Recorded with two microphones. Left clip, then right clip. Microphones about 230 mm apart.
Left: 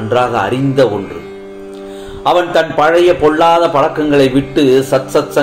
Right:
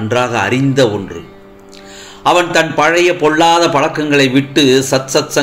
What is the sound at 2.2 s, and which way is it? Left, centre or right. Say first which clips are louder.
A man's voice: even; right.